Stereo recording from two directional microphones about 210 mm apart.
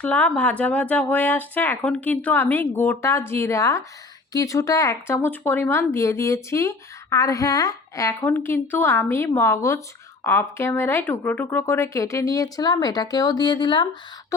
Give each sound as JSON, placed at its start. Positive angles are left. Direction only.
{"t": 0.0, "sound": "speech", "side_deg": 5}